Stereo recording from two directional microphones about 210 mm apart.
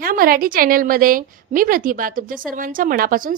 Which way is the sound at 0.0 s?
45° right (ahead or behind).